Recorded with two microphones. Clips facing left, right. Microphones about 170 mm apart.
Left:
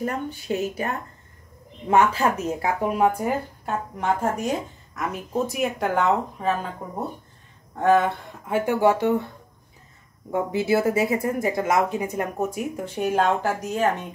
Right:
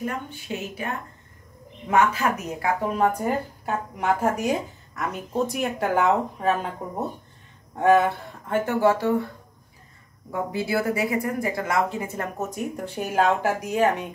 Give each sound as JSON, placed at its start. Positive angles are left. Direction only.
{"t": 0.0, "sound": "speech", "side_deg": 40}
{"t": 1.9, "sound": "a woman's voice", "side_deg": 30}
{"t": 2.9, "sound": "speech", "side_deg": 5}
{"t": 3.6, "sound": "a woman's voice", "side_deg": -10}
{"t": 5.1, "sound": "speech", "side_deg": 0}
{"t": 7.8, "sound": "a woman's voice", "side_deg": -10}
{"t": 8.5, "sound": "speech", "side_deg": 10}
{"t": 10.3, "sound": "speech", "side_deg": 20}